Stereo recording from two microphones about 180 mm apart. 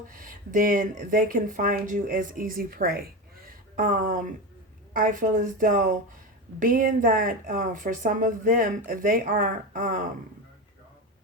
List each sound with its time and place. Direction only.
0.1 s speech: 50° right (ahead or behind)